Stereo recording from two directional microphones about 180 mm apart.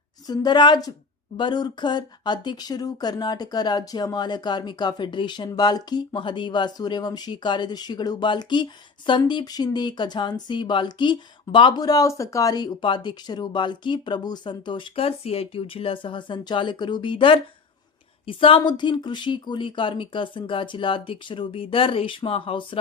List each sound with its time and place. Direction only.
0.3 s speech: 25° left (ahead or behind)